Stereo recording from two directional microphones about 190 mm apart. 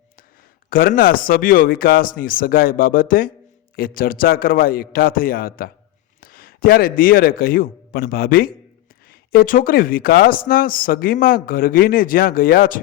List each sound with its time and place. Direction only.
0.7 s a man's voice: 50° left (ahead or behind)